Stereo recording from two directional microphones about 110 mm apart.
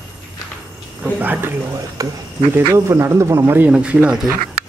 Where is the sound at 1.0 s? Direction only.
15° right (ahead or behind).